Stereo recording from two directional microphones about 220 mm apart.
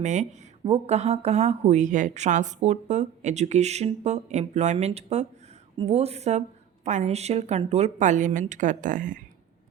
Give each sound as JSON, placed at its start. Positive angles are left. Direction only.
{"t": 0.0, "sound": "a woman's voice", "side_deg": -35}